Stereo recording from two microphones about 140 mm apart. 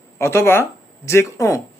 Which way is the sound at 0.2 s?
20° left (ahead or behind).